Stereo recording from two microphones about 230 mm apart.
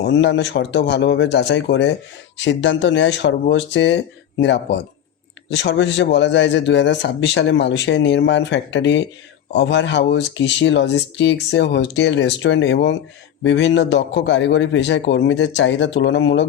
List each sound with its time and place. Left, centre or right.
0.0 s speech: left